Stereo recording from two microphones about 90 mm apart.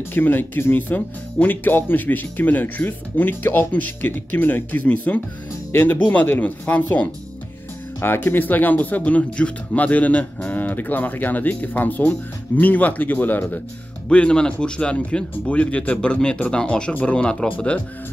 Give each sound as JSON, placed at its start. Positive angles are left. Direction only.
{"t": 0.1, "sound": "speech", "side_deg": 20}